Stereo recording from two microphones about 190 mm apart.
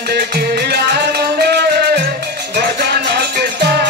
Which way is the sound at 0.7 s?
55° right (ahead or behind).